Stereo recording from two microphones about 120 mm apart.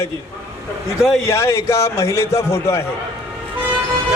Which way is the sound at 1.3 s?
25° left (ahead or behind).